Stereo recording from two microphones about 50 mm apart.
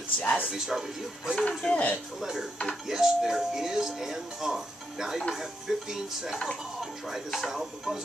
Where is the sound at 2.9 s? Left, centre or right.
Centre.